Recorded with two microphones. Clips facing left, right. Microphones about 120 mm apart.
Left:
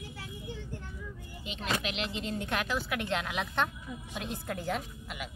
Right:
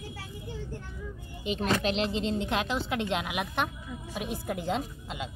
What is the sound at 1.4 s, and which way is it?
A woman's voice, 35° right (ahead or behind).